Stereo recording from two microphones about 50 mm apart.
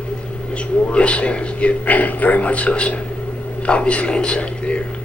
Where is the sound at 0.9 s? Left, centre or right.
Left.